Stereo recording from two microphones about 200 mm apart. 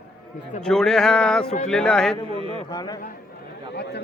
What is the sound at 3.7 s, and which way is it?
Speech, 55° left (ahead or behind).